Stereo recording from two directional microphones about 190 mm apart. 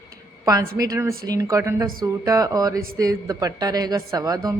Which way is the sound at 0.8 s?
15° right (ahead or behind).